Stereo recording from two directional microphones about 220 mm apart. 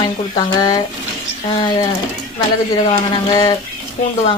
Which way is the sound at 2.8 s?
20° left (ahead or behind).